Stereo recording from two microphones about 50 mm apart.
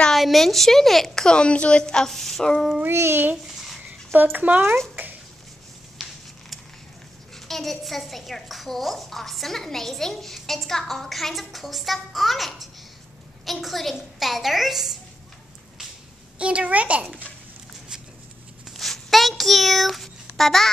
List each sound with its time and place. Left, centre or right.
0.1 s a woman's voice: centre
1.2 s a woman's voice: centre
2.0 s a woman's voice: centre
2.9 s a child's voice: right
3.4 s a sound: centre
4.1 s speech: right
4.6 s a child's voice: right
6.0 s a sound: centre
7.3 s a woman's voice: centre
16.3 s a woman's voice: right
18.7 s a sound: centre